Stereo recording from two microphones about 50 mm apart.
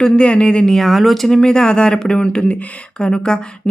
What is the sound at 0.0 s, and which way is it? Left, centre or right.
Speech, left.